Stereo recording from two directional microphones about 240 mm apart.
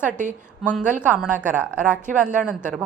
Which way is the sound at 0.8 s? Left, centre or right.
Centre.